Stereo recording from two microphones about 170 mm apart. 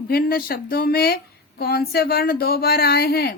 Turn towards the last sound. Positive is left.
turn(degrees=65)  # may be behind; listen again after turning